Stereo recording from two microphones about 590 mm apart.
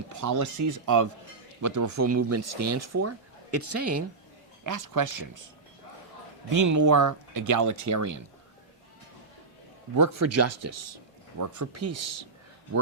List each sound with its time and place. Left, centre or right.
0.1 s speech: right
6.5 s speech: right
9.9 s speech: right